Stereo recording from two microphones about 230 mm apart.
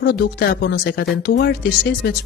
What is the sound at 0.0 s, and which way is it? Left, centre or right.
Speech, left.